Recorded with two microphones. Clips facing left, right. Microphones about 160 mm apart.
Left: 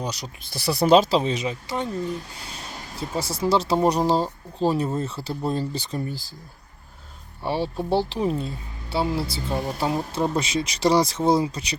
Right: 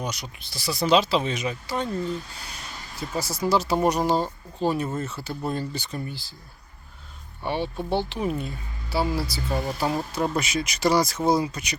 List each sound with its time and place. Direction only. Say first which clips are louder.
0.0 s speech: left 1 dB; 35° left (ahead or behind)
0.5 s speech: left 4 dB; 60° left (ahead or behind); by 2.1 s 20° left (ahead or behind)
3.2 s speech: left 1 dB; 30° left (ahead or behind)
7.4 s speech: left 2 dB; 35° left (ahead or behind)